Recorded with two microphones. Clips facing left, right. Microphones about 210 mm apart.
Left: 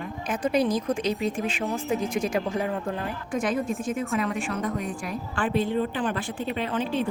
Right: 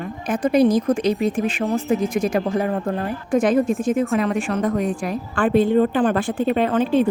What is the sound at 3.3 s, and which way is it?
A woman's voice, 75° right (ahead or behind).